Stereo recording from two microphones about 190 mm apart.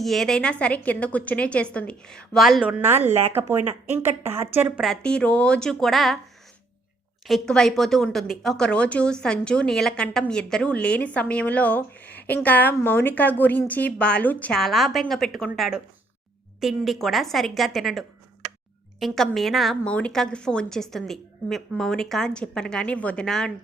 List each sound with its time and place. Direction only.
0.0 s speech: centre (ahead or behind)
3.6 s speech: 35° right (ahead or behind)
4.2 s a woman's voice: 10° right (ahead or behind)
4.8 s speech: centre (ahead or behind)
7.3 s speech: centre (ahead or behind)